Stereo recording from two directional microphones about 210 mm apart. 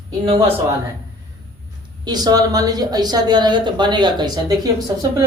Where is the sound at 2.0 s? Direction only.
20° right (ahead or behind).